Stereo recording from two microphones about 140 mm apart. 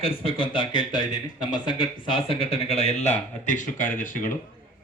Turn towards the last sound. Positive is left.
turn(degrees=70)  # may be behind; listen again after turning